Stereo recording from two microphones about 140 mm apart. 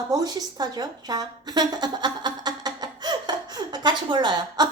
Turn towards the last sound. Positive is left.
turn(degrees=-30)  # may be behind; listen again after turning